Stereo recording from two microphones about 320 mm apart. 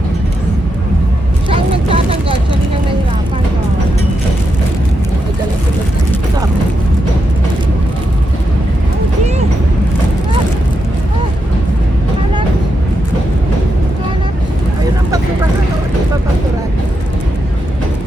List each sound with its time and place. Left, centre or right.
1.5 s vehicle: centre